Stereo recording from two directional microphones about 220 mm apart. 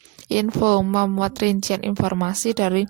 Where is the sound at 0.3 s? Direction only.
40° right (ahead or behind).